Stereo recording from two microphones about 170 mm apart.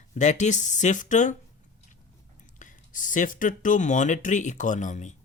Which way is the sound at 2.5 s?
50° left (ahead or behind).